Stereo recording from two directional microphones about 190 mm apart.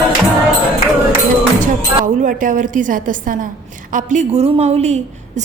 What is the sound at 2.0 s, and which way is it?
A woman's voice, 45° right (ahead or behind).